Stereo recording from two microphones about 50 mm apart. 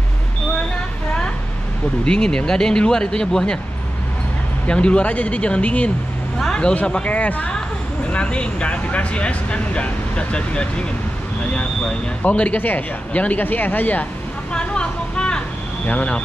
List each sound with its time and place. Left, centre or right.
2.0 s speech: centre
4.6 s speech: left
6.9 s speech: left
12.2 s speech: left
14.5 s vehicle: centre
15.9 s speech: left